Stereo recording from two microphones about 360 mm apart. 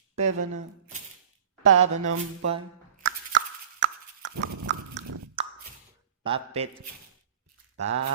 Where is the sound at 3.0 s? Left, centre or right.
Right.